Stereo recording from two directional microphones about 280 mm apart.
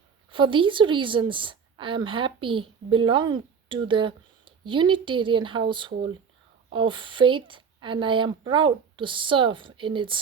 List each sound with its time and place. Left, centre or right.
0.3 s a woman's voice: centre